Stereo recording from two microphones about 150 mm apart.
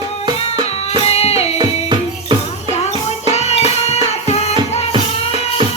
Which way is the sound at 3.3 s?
45° left (ahead or behind).